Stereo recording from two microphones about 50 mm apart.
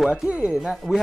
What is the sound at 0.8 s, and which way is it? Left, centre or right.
Speech, centre.